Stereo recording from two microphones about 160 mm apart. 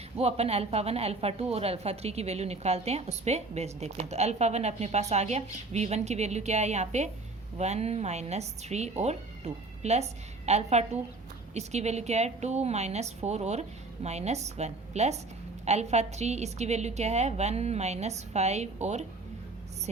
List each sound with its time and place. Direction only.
0.2 s speech: 40° right (ahead or behind)